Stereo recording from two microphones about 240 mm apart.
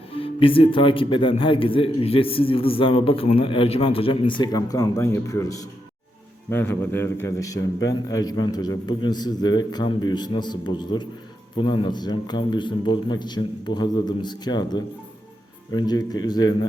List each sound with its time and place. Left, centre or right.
0.2 s a man's voice: left